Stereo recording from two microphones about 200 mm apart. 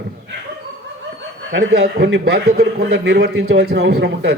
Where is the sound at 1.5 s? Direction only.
60° right (ahead or behind).